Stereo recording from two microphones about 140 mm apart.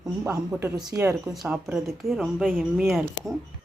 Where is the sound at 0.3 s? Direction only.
15° right (ahead or behind).